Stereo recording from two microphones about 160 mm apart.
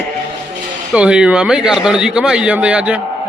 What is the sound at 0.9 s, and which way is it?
A man's voice, 5° right (ahead or behind).